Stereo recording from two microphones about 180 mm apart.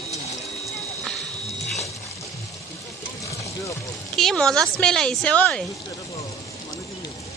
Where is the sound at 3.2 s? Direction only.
20° left (ahead or behind).